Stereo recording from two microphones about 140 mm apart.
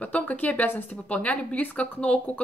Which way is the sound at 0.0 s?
10° left (ahead or behind).